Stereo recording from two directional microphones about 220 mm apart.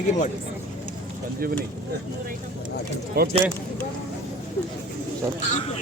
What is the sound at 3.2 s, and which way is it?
Speech, 40° right (ahead or behind).